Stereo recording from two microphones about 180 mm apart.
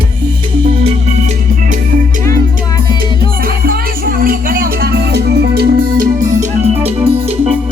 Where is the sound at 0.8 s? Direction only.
40° right (ahead or behind).